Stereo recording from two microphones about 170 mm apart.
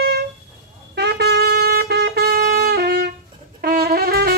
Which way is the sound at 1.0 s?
70° right (ahead or behind).